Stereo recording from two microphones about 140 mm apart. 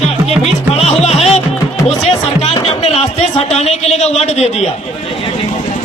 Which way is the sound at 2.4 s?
40° left (ahead or behind).